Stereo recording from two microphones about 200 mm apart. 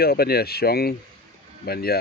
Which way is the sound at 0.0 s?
50° left (ahead or behind).